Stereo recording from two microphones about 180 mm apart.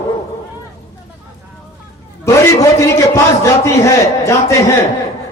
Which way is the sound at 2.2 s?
15° left (ahead or behind).